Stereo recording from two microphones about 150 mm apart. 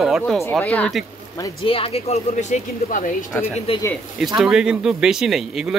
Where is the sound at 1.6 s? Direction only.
40° left (ahead or behind); by 3.1 s 60° left (ahead or behind).